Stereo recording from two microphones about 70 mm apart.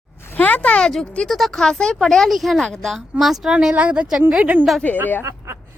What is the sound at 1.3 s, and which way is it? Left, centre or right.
Speech, centre.